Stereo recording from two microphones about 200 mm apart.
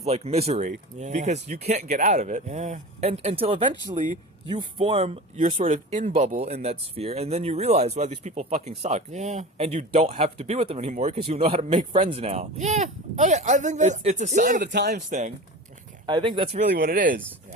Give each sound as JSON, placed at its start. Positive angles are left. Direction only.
{"t": 0.0, "sound": "speech", "side_deg": -30}
{"t": 14.6, "sound": "speech", "side_deg": -55}
{"t": 16.0, "sound": "speech", "side_deg": -25}
{"t": 16.7, "sound": "speech", "side_deg": -45}